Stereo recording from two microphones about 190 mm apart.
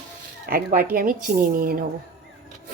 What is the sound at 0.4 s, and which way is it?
A woman's voice, 50° right (ahead or behind).